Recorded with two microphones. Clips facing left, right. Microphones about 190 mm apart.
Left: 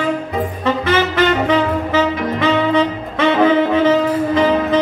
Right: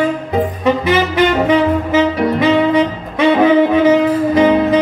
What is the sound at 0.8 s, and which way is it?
Saxophone, 15° right (ahead or behind).